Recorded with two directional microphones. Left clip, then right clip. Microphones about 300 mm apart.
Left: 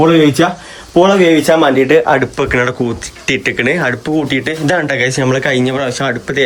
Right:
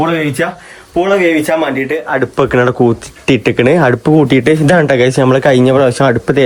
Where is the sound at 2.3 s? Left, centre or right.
Centre.